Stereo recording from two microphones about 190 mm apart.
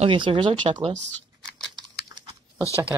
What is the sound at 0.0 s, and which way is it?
Speech, 30° right (ahead or behind).